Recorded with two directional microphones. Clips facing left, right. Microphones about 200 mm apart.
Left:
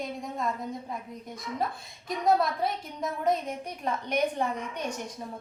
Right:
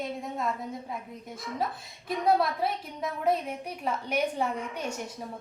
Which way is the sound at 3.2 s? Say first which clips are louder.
Right 1 dB; 5° right (ahead or behind).